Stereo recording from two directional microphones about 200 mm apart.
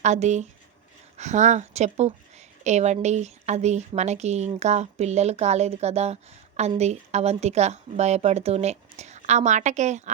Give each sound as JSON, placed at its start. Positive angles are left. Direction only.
{"t": 0.0, "sound": "speech", "side_deg": -35}